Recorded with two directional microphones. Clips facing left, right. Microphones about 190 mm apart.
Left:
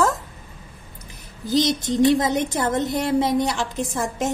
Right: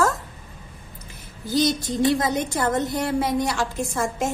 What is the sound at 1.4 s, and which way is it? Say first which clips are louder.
A woman's voice: left 1 dB; 20° left (ahead or behind).